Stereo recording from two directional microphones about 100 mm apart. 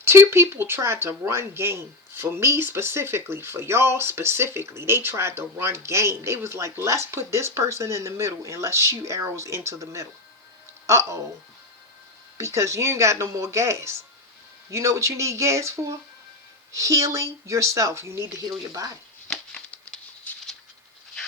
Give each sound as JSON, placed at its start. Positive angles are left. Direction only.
{"t": 0.0, "sound": "speech", "side_deg": -25}
{"t": 12.4, "sound": "speech", "side_deg": -30}
{"t": 19.3, "sound": "a sound", "side_deg": 5}